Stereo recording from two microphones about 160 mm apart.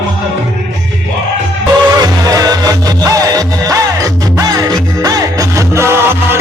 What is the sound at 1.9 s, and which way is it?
Music, 25° right (ahead or behind).